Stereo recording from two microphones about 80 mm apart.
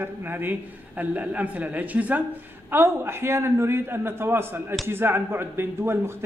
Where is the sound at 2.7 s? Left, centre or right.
Right.